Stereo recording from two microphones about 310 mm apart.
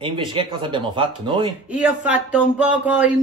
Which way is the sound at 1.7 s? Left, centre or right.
Centre.